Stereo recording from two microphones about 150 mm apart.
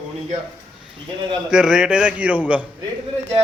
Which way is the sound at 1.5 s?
5° right (ahead or behind).